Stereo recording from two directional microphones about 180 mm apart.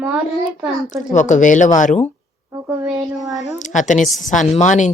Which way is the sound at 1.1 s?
45° left (ahead or behind).